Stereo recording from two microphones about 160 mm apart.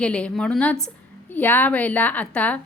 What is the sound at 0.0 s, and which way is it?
A woman's voice, 5° left (ahead or behind).